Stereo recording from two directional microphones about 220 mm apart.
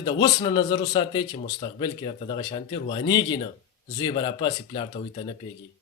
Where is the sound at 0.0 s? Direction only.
20° left (ahead or behind).